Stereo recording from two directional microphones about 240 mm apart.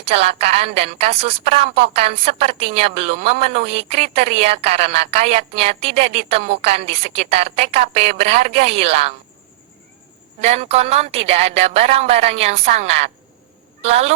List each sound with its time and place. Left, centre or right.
0.0 s a woman's voice: right
10.4 s a woman's voice: right